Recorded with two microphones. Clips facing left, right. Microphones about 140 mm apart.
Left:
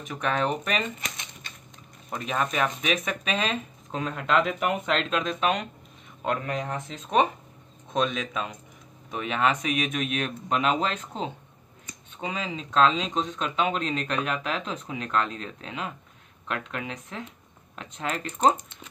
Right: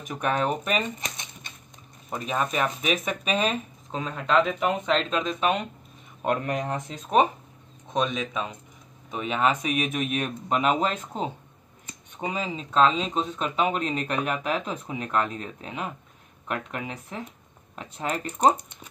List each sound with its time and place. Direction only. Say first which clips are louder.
0.0 s speech: right 1 dB; 10° right (ahead or behind)
0.8 s typewriter: right 1 dB; 20° right (ahead or behind)
2.0 s speech: right 1 dB; 5° right (ahead or behind)
6.4 s speech: right 2 dB; 15° right (ahead or behind)
7.9 s speech: even; 5° right (ahead or behind)